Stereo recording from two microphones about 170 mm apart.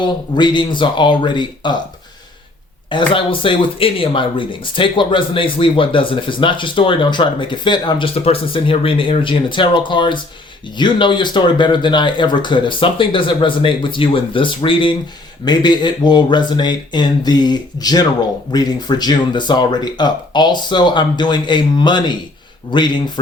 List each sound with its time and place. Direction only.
0.0 s speech: 25° left (ahead or behind)
2.9 s speech: 30° left (ahead or behind)